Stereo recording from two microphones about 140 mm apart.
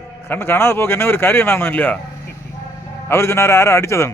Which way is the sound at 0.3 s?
15° left (ahead or behind).